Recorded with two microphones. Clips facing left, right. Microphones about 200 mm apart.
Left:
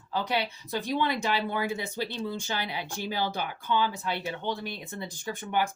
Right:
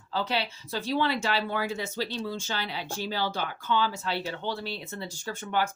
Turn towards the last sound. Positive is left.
turn(degrees=15)  # may be behind; listen again after turning